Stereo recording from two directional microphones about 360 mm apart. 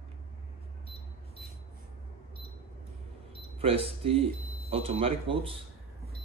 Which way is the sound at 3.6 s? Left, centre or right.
Centre.